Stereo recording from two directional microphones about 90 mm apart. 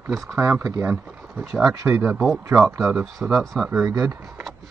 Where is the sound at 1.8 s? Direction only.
30° right (ahead or behind).